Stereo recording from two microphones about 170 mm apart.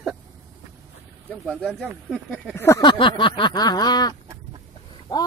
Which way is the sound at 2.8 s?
30° left (ahead or behind).